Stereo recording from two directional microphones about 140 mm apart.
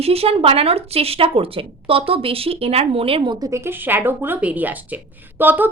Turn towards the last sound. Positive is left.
turn(degrees=-15)  # may be behind; listen again after turning